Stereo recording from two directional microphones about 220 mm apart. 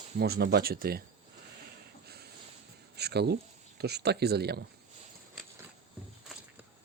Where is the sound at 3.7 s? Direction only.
50° right (ahead or behind).